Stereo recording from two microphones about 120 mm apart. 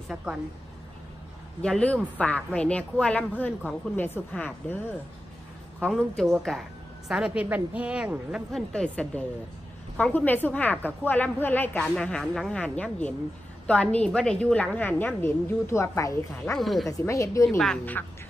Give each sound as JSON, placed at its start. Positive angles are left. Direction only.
{"t": 0.1, "sound": "a woman's voice", "side_deg": -5}
{"t": 1.6, "sound": "a woman's voice", "side_deg": 10}
{"t": 5.9, "sound": "a woman's voice", "side_deg": 5}
{"t": 8.5, "sound": "a woman's voice", "side_deg": 5}
{"t": 11.8, "sound": "a woman's voice", "side_deg": 5}
{"t": 16.5, "sound": "a woman's voice", "side_deg": 0}
{"t": 16.8, "sound": "a woman's voice", "side_deg": 25}